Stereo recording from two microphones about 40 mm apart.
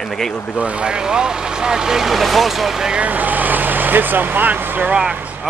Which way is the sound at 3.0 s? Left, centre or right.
Right.